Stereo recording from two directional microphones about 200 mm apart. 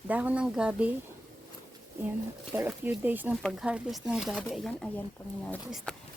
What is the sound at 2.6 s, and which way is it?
Speech, 10° right (ahead or behind).